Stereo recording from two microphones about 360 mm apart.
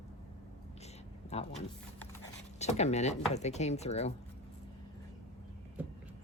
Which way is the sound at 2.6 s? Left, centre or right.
Centre.